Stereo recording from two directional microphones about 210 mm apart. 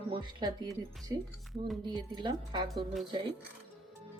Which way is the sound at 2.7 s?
Centre (ahead or behind).